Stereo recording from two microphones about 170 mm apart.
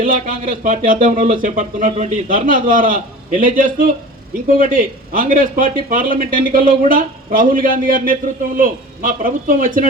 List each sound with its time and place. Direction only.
0.0 s speech: 55° right (ahead or behind)